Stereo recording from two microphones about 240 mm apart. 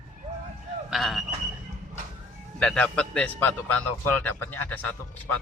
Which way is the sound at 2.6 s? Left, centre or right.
Centre.